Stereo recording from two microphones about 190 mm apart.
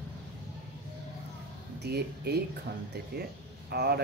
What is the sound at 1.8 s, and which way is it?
Speech, 55° right (ahead or behind).